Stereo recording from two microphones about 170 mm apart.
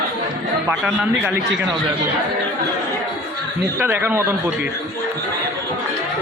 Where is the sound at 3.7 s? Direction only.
10° right (ahead or behind).